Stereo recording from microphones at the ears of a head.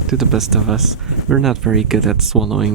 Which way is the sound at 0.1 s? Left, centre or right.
Right.